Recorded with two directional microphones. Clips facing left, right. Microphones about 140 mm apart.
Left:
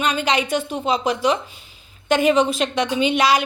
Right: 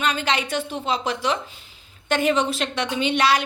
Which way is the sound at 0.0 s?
15° left (ahead or behind).